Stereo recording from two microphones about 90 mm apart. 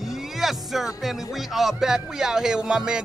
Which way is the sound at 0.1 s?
5° right (ahead or behind).